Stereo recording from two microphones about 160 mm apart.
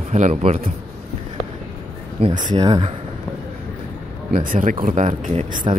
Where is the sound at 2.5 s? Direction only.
25° right (ahead or behind).